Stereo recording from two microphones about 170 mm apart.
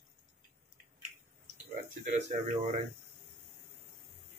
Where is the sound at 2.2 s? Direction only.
40° right (ahead or behind).